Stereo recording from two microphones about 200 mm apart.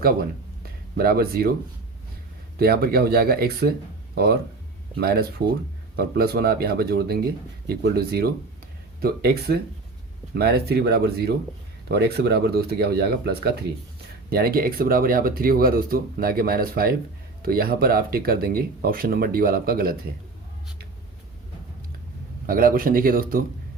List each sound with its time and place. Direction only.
0.9 s speech: 50° right (ahead or behind)
2.6 s speech: 50° right (ahead or behind)
4.9 s speech: 50° right (ahead or behind)
22.4 s speech: 45° right (ahead or behind)